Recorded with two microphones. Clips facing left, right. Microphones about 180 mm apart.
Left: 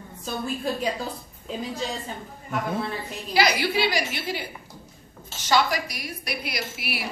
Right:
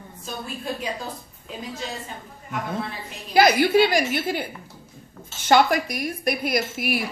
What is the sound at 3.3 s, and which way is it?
A man's voice, 50° right (ahead or behind).